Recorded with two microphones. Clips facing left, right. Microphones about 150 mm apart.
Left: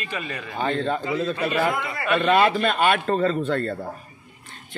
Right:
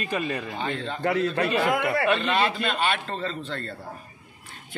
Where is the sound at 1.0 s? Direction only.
70° right (ahead or behind).